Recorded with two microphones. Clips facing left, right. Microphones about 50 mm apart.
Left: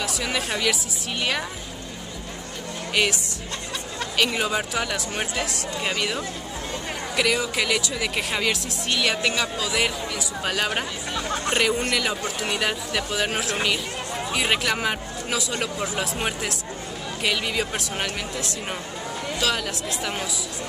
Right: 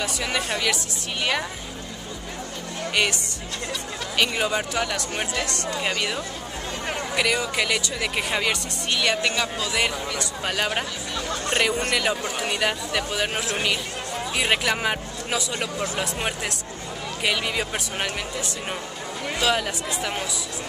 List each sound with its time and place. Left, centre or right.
0.0 s speech: centre
2.9 s speech: centre
4.2 s speech: centre
11.2 s music: left
11.5 s speech: centre